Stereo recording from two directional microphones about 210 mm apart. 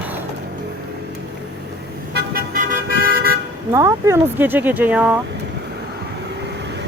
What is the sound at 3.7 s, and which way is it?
Speech, 15° right (ahead or behind).